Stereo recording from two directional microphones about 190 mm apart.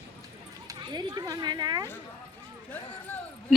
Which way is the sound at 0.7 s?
20° right (ahead or behind).